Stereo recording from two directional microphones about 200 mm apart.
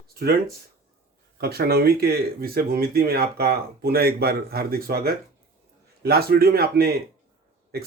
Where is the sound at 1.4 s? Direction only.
50° right (ahead or behind).